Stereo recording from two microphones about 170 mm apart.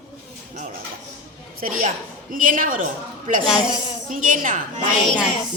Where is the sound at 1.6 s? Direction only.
55° right (ahead or behind).